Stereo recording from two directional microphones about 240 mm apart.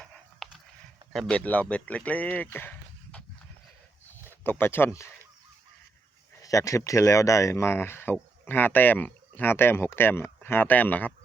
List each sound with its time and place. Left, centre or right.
0.4 s a sound: centre
1.1 s speech: centre
4.4 s speech: centre
6.4 s speech: centre